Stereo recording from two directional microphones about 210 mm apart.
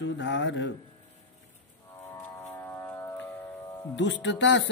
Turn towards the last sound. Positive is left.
turn(degrees=60)  # may be behind; listen again after turning